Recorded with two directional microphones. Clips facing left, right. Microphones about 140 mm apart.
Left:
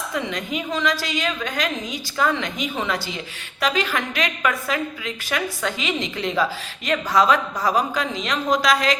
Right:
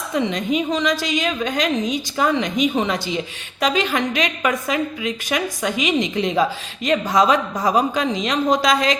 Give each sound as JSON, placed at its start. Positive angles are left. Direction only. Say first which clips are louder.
{"t": 0.1, "sound": "a woman's voice", "louder": "right 8 dB", "side_deg": -20}